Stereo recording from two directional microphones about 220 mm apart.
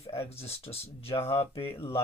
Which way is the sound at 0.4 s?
25° left (ahead or behind).